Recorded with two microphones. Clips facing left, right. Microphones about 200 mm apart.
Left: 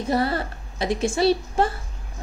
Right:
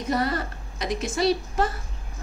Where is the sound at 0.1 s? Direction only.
30° left (ahead or behind).